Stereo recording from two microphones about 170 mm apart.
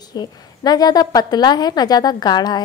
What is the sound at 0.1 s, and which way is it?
A woman's voice, 25° left (ahead or behind).